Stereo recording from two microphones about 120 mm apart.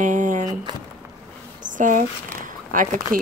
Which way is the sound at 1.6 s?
90° right.